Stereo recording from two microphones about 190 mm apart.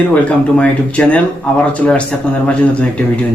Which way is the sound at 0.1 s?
5° left (ahead or behind).